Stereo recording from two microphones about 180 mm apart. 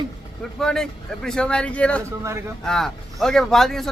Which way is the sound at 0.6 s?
5° left (ahead or behind).